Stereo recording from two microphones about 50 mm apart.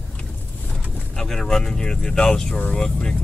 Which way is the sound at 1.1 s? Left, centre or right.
Centre.